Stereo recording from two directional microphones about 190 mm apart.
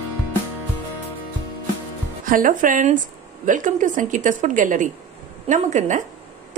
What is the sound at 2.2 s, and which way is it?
A woman's voice, 45° right (ahead or behind).